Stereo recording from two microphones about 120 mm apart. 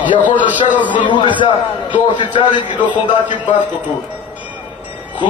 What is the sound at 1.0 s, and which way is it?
A man's voice, 40° left (ahead or behind).